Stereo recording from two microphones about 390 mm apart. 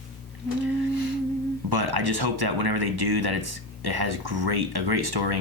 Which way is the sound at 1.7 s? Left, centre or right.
Right.